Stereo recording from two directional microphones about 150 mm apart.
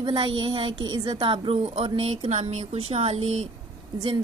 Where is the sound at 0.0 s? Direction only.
35° right (ahead or behind).